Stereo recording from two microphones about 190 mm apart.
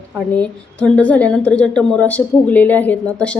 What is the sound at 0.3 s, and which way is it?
A woman's voice, 5° left (ahead or behind).